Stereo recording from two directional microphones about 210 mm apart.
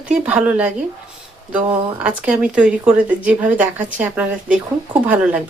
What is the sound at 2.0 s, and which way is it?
Speech, 5° right (ahead or behind).